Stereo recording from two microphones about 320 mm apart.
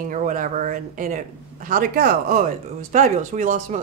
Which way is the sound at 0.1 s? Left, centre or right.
Right.